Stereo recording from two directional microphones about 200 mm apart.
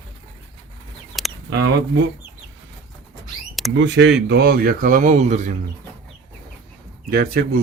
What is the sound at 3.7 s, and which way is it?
Speech, 65° right (ahead or behind).